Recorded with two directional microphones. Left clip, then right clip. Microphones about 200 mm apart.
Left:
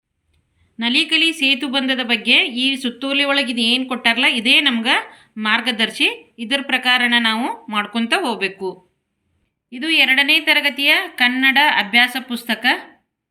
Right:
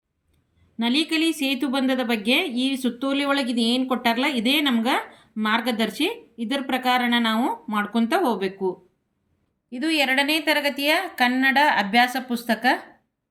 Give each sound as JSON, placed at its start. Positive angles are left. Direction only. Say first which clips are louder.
{"t": 0.8, "sound": "a woman's voice", "louder": "left 6 dB", "side_deg": -45}